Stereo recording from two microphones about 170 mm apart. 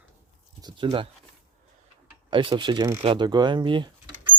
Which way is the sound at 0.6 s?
25° right (ahead or behind).